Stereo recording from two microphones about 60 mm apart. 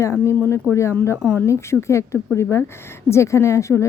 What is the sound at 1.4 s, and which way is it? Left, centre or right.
Speech, left.